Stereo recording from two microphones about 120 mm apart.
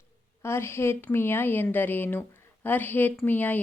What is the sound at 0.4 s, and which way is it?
A woman's voice, 20° left (ahead or behind).